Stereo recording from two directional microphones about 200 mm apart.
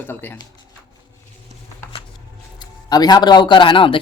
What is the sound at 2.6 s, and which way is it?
A man's voice, 20° left (ahead or behind).